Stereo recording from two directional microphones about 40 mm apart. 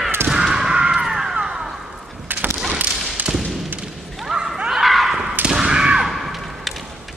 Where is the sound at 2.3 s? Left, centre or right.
Right.